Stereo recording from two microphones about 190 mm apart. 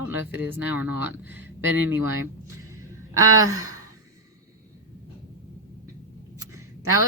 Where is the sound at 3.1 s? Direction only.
15° right (ahead or behind).